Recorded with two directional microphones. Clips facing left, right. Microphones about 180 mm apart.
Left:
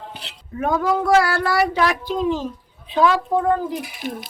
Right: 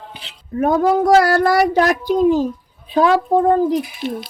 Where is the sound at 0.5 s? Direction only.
40° right (ahead or behind).